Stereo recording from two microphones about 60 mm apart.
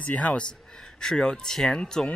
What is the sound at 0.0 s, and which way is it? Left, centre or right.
A man's voice, left.